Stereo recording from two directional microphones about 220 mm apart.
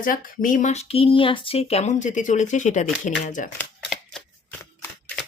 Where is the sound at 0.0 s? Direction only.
40° left (ahead or behind).